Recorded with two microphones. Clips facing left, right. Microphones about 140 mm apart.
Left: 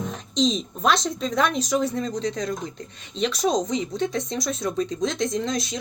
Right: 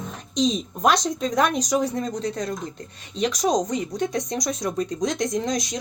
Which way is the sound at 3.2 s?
15° right (ahead or behind).